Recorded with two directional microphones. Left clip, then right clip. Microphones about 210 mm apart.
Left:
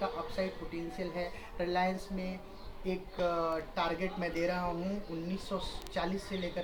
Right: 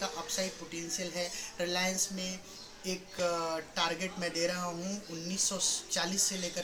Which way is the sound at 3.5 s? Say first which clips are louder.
Right 1 dB; 15° right (ahead or behind).